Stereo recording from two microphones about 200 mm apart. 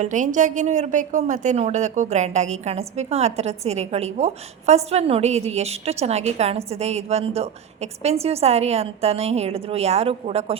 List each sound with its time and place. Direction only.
0.0 s a woman's voice: 40° right (ahead or behind)